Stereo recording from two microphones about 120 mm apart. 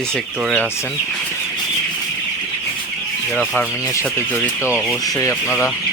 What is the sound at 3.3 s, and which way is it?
Speech, centre (ahead or behind).